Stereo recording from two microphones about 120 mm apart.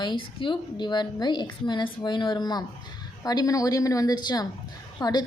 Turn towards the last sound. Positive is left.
turn(degrees=35)  # may be behind; listen again after turning